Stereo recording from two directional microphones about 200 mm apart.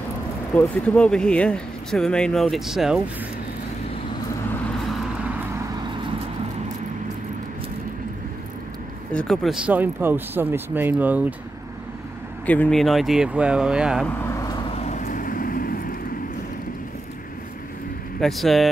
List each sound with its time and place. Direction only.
0.6 s speech: 5° left (ahead or behind)
9.1 s speech: centre (ahead or behind)
12.4 s speech: 5° left (ahead or behind)
14.2 s vehicle: 15° left (ahead or behind)
14.7 s vehicle: 35° left (ahead or behind)
18.2 s speech: centre (ahead or behind)